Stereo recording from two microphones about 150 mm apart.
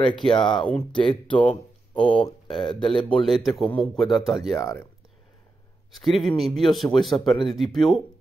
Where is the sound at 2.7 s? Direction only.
5° left (ahead or behind).